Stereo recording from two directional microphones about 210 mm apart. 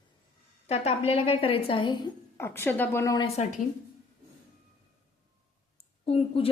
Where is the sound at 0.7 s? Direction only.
30° left (ahead or behind).